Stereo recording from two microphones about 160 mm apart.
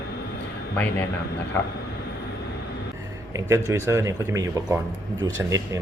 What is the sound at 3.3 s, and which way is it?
Speech, 20° right (ahead or behind).